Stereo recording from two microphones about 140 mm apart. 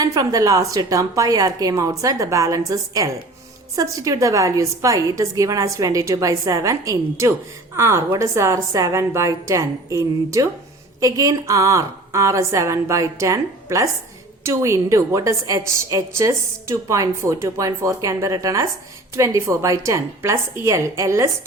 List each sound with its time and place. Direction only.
0.0 s a woman's voice: 25° right (ahead or behind)